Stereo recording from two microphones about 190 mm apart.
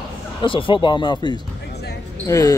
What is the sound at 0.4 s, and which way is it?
Speech, 25° left (ahead or behind).